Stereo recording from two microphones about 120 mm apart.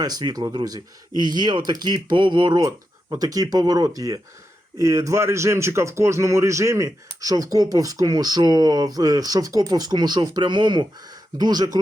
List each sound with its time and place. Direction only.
0.0 s speech: 35° right (ahead or behind)
2.6 s speech: 30° right (ahead or behind)